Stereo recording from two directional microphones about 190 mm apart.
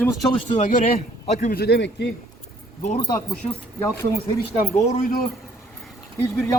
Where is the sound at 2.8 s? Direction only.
35° left (ahead or behind).